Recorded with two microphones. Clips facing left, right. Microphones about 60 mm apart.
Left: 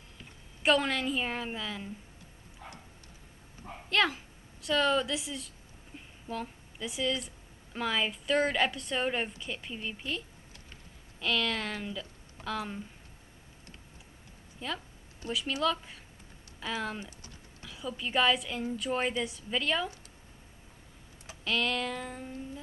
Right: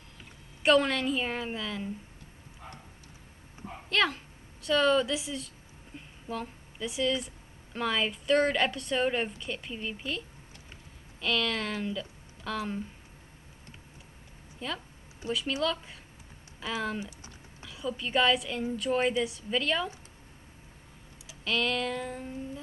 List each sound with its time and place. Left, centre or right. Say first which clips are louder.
0.6 s speech: right 3 dB; centre
3.9 s a woman's voice: even; centre
14.6 s speech: right 1 dB; centre
17.0 s typing: right 4 dB; centre
17.6 s speech: right 3 dB; centre
21.5 s speech: right 2 dB; centre